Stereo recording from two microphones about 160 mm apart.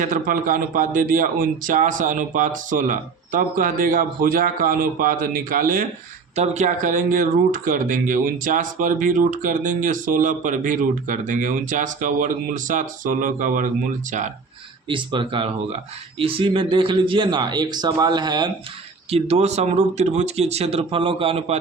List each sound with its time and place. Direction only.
0.0 s speech: 60° right (ahead or behind)
6.3 s speech: 45° right (ahead or behind)
14.8 s a man's voice: 30° right (ahead or behind)
19.1 s speech: 40° right (ahead or behind)